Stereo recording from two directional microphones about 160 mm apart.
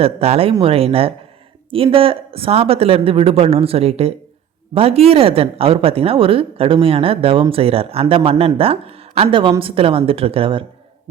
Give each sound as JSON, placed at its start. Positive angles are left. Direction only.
{"t": 0.0, "sound": "speech", "side_deg": -40}